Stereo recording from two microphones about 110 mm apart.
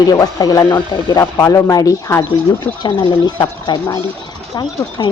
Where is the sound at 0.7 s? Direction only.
20° left (ahead or behind).